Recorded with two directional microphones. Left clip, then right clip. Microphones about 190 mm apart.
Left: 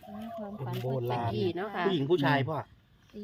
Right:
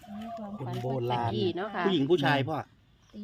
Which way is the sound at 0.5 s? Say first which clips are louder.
Right 2 dB; 55° right (ahead or behind).